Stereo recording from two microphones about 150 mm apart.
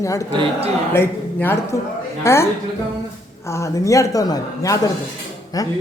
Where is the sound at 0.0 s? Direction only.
20° left (ahead or behind).